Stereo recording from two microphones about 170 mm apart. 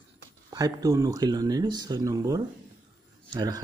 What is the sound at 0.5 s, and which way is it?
Speech, 20° right (ahead or behind).